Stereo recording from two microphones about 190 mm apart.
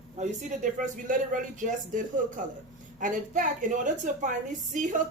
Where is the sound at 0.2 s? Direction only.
40° right (ahead or behind).